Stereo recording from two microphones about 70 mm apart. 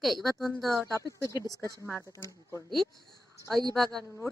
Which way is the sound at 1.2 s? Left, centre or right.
Left.